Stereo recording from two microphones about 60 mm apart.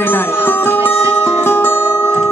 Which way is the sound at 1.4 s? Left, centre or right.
Left.